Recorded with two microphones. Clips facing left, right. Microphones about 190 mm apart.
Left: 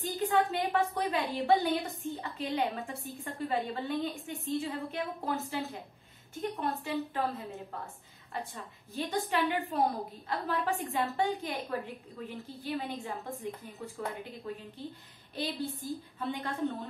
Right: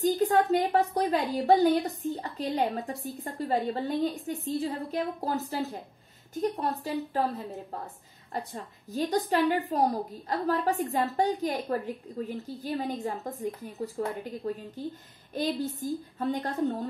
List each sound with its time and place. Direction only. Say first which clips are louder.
0.0 s a woman's voice: right 5 dB; 40° right (ahead or behind)